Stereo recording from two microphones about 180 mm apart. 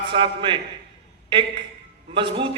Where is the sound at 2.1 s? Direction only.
30° right (ahead or behind).